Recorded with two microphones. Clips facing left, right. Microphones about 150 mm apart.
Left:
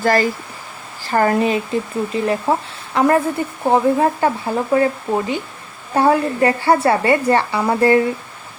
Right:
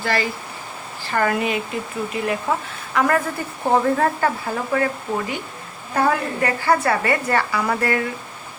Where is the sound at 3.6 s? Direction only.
15° left (ahead or behind).